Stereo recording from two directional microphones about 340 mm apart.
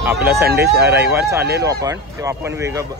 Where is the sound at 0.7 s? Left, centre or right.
Centre.